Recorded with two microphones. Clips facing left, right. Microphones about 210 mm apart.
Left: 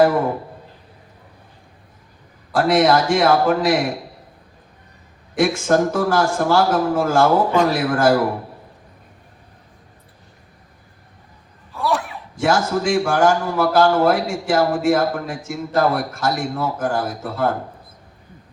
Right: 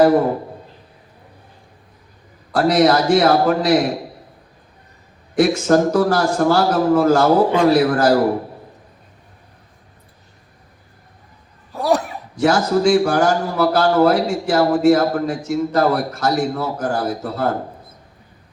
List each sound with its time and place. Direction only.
2.5 s a man's voice: 40° right (ahead or behind)
5.4 s a man's voice: 40° right (ahead or behind)
11.7 s a man's voice: 40° right (ahead or behind)